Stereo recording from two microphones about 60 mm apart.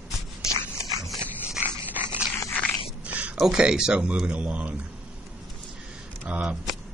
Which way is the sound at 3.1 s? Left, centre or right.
Right.